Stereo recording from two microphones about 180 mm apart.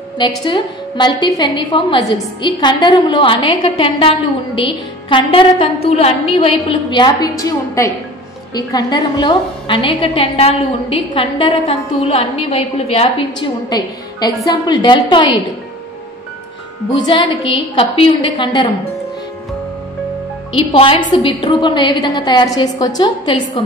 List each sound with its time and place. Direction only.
0.2 s a woman's voice: 25° left (ahead or behind)
17.0 s a woman's voice: 30° left (ahead or behind)
20.5 s a woman's voice: 30° left (ahead or behind)